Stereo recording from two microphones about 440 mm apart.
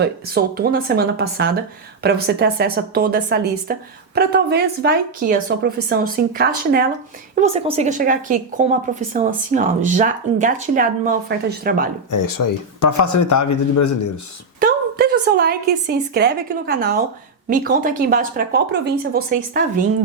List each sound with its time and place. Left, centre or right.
0.0 s a woman's voice: right
12.1 s speech: left
14.6 s a woman's voice: right